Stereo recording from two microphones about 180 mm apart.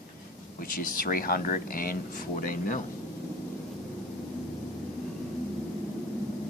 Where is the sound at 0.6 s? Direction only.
55° left (ahead or behind).